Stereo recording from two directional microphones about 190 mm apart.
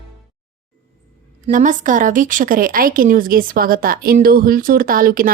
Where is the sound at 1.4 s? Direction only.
40° right (ahead or behind).